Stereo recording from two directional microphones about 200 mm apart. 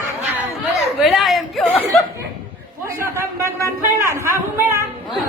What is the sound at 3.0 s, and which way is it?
A man's voice, 15° right (ahead or behind).